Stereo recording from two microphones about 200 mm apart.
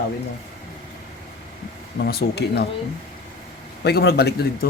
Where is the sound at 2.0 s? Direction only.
50° left (ahead or behind).